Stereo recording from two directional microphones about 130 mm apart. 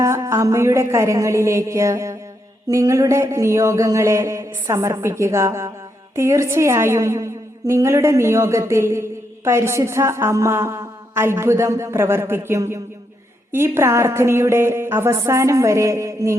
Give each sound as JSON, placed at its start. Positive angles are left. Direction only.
{"t": 0.0, "sound": "a woman's voice", "side_deg": -20}